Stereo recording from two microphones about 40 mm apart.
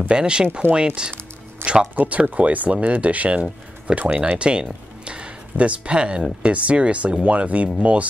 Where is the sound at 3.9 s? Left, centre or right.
Right.